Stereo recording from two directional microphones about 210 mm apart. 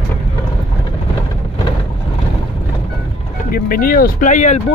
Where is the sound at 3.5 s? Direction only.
40° left (ahead or behind).